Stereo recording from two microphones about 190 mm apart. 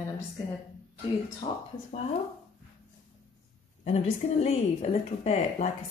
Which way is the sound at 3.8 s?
35° left (ahead or behind).